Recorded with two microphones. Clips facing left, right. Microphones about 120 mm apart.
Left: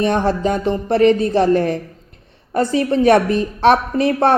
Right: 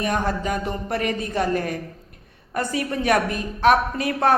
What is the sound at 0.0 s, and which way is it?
Speech, 30° left (ahead or behind).